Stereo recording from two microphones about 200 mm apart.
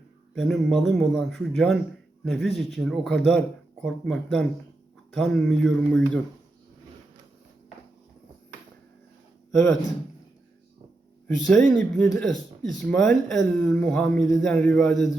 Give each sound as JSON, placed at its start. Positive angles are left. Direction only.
{"t": 0.3, "sound": "a man's voice", "side_deg": 0}
{"t": 9.5, "sound": "speech", "side_deg": 0}
{"t": 11.3, "sound": "a man's voice", "side_deg": 0}